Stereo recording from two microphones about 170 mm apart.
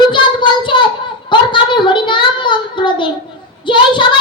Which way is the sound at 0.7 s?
30° left (ahead or behind).